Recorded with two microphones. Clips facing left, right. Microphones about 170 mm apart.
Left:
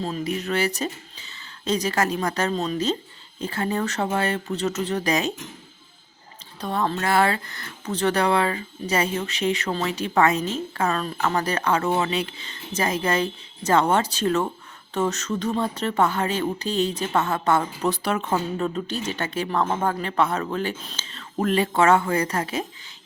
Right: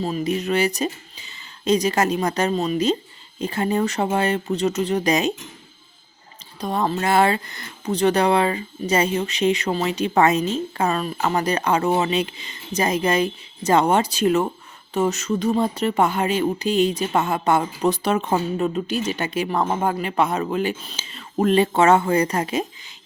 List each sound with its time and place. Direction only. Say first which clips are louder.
0.0 s speech: right 4 dB; 15° right (ahead or behind)
6.6 s speech: right 2 dB; 15° right (ahead or behind)
21.4 s speech: right 3 dB; 25° right (ahead or behind)